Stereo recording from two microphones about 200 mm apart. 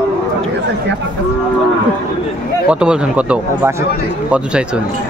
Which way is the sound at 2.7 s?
5° right (ahead or behind).